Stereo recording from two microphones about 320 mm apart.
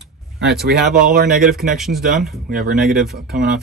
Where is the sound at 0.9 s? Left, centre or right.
Right.